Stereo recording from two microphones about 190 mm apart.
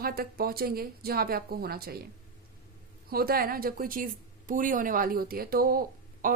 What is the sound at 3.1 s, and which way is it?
Speech, 50° right (ahead or behind).